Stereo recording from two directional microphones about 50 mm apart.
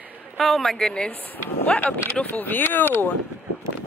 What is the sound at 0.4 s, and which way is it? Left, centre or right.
Speech, centre.